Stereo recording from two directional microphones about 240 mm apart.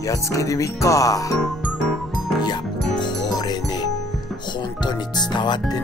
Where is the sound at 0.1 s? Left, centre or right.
Centre.